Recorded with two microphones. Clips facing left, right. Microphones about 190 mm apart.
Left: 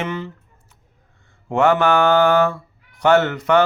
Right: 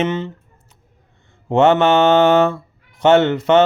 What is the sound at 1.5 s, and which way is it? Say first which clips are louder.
Mantra: right 3 dB; 25° right (ahead or behind).